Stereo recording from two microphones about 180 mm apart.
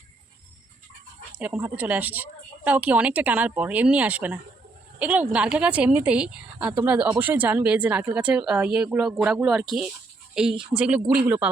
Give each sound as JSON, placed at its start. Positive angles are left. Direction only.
{"t": 1.4, "sound": "speech", "side_deg": -10}